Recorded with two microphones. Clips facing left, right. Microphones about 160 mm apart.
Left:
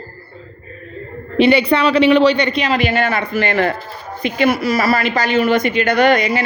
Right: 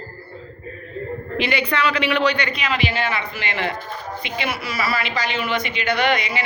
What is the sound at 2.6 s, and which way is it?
Speech, 40° left (ahead or behind).